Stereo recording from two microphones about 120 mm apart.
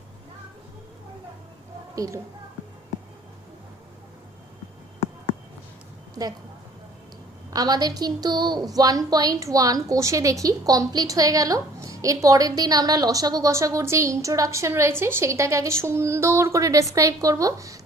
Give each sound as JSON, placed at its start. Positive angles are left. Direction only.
{"t": 2.0, "sound": "a woman's voice", "side_deg": -25}
{"t": 7.5, "sound": "a woman's voice", "side_deg": -35}